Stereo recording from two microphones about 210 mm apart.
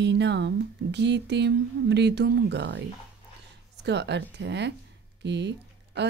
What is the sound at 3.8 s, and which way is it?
Speech, 55° right (ahead or behind).